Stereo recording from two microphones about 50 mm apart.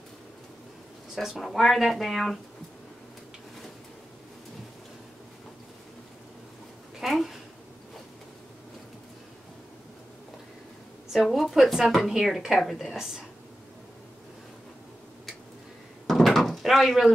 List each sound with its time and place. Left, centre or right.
1.4 s a woman's voice: centre
7.0 s a sound: centre
11.1 s a woman's voice: centre
16.1 s door: centre